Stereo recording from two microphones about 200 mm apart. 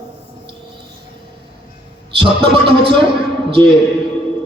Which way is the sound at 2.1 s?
25° right (ahead or behind).